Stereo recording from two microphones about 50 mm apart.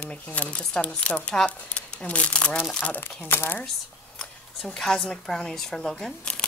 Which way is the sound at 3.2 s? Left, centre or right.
Left.